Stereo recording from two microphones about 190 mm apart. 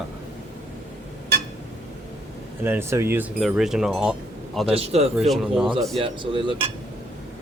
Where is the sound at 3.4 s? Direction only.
Centre (ahead or behind).